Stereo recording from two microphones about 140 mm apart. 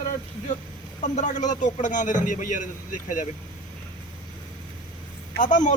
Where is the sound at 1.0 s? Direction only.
55° left (ahead or behind).